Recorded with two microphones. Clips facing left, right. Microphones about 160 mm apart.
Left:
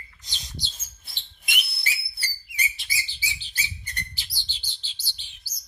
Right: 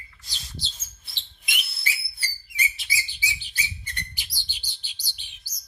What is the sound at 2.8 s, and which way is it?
Bird, 15° right (ahead or behind).